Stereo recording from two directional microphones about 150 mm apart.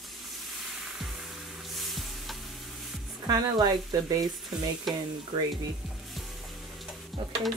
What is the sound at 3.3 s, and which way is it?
Speech, 25° right (ahead or behind).